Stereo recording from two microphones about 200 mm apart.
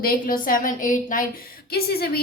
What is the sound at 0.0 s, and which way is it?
A woman's voice, 45° left (ahead or behind).